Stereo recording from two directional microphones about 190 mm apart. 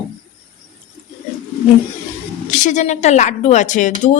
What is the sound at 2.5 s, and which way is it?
Speech, 40° left (ahead or behind).